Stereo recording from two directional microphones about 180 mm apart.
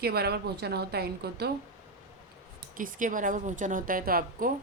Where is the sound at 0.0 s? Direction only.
60° right (ahead or behind).